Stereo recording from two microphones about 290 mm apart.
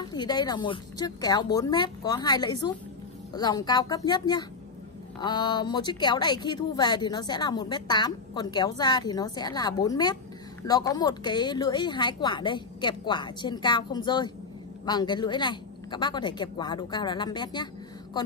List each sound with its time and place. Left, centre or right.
0.0 s speech: centre